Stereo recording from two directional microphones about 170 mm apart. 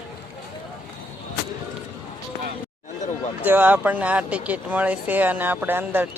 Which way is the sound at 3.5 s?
10° right (ahead or behind).